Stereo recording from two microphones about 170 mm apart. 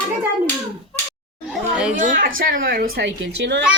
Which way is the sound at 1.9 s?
55° right (ahead or behind).